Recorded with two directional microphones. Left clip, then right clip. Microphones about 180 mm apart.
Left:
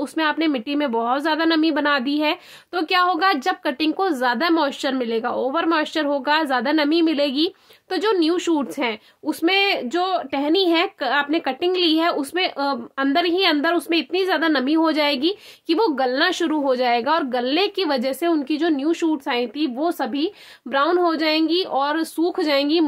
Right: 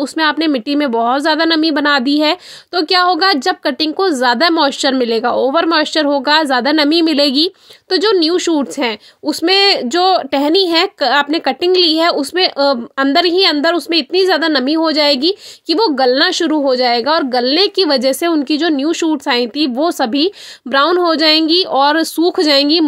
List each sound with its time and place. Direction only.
0.0 s speech: 35° right (ahead or behind)